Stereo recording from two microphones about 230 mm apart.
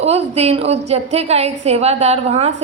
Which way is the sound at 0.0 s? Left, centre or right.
Right.